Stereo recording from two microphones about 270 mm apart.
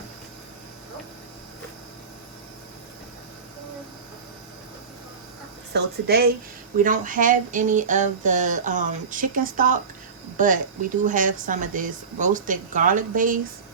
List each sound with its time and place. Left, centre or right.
5.7 s speech: right